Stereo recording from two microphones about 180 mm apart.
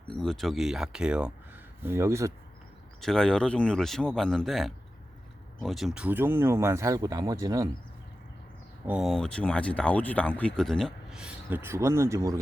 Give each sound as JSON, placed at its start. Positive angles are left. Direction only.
{"t": 0.1, "sound": "speech", "side_deg": 0}
{"t": 3.0, "sound": "speech", "side_deg": 5}
{"t": 8.9, "sound": "speech", "side_deg": 0}